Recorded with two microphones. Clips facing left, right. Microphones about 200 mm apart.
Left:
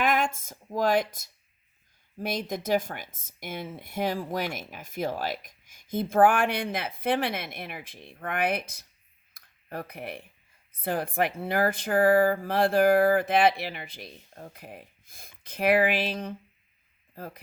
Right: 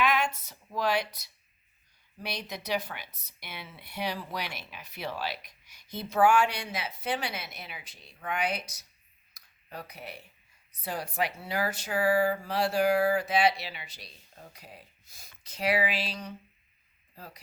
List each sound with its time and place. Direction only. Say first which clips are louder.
0.0 s speech: left 2 dB; 50° left (ahead or behind)
9.3 s a sound: left 6 dB; 55° left (ahead or behind)
10.7 s speech: left 6 dB; 55° left (ahead or behind)